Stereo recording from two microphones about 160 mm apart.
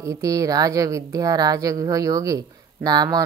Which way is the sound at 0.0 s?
20° right (ahead or behind).